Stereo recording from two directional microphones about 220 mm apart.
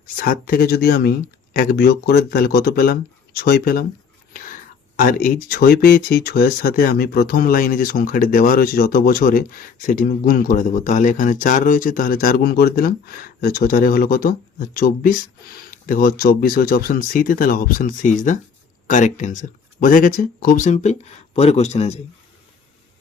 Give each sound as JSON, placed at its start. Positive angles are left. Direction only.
{"t": 0.2, "sound": "speech", "side_deg": 40}
{"t": 4.9, "sound": "speech", "side_deg": 40}